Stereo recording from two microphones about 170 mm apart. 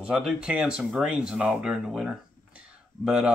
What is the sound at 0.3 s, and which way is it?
Speech, 5° right (ahead or behind).